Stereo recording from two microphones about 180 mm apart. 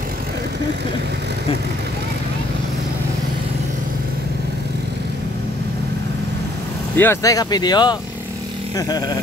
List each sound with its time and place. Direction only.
7.0 s speech: 15° left (ahead or behind)